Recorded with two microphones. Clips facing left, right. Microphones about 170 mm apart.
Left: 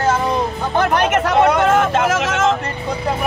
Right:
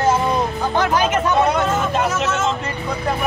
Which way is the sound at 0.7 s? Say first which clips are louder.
Left 2 dB; 65° left (ahead or behind).